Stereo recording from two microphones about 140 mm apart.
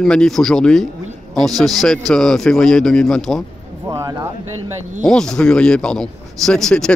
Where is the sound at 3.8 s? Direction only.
25° right (ahead or behind).